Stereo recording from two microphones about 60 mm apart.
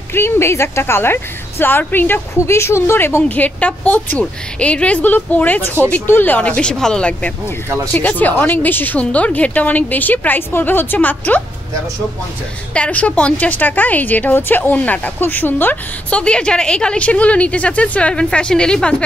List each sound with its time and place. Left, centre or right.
0.1 s a woman's voice: left
2.4 s speech: left
3.2 s a woman's voice: left
6.4 s a woman's voice: centre
12.7 s a woman's voice: left
16.1 s a woman's voice: centre